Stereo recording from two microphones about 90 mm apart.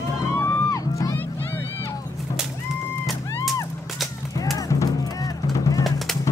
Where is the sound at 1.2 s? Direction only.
20° left (ahead or behind).